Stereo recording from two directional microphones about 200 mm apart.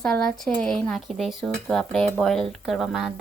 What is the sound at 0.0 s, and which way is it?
Speech, 5° left (ahead or behind).